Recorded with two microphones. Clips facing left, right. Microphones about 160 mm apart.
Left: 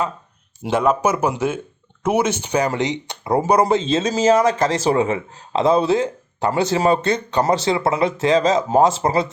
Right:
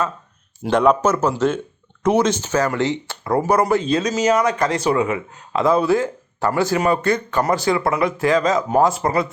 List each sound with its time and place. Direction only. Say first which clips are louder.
0.7 s speech: right 2 dB; 5° left (ahead or behind); by 9.2 s 25° left (ahead or behind)